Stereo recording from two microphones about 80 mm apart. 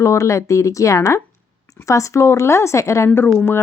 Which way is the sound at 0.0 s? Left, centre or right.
Left.